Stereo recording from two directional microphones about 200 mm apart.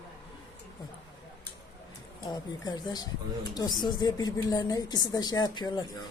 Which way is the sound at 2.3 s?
20° left (ahead or behind).